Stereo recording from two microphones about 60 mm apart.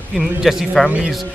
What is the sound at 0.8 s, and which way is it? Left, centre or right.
Speech, centre.